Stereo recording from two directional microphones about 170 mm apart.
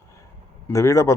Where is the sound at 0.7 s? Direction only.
20° left (ahead or behind).